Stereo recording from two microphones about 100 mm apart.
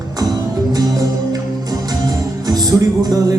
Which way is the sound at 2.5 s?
40° right (ahead or behind).